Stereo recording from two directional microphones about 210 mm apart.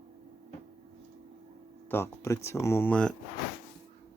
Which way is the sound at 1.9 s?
10° left (ahead or behind).